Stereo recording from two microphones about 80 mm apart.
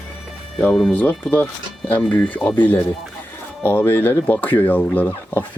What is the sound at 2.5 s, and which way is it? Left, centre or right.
Speech, left.